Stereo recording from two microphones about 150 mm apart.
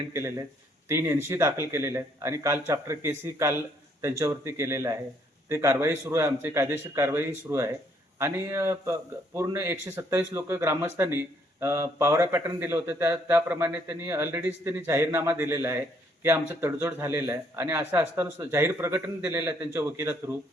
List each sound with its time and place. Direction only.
0.1 s speech: 15° right (ahead or behind)